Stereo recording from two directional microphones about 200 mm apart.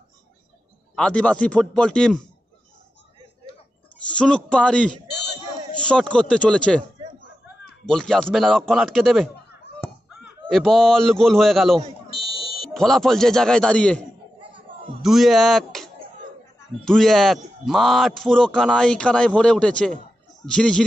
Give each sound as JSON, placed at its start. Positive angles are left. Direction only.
{"t": 0.9, "sound": "a man's voice", "side_deg": 5}
{"t": 4.1, "sound": "a man's voice", "side_deg": 5}
{"t": 7.8, "sound": "a man's voice", "side_deg": 5}
{"t": 10.5, "sound": "a man's voice", "side_deg": 0}
{"t": 12.1, "sound": "fire alarm", "side_deg": 25}
{"t": 12.7, "sound": "a man's voice", "side_deg": 0}